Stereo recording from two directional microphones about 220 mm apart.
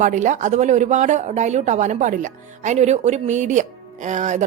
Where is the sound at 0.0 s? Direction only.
35° right (ahead or behind).